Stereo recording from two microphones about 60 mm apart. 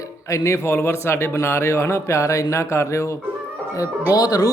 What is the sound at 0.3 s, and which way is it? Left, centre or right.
A man's voice, left.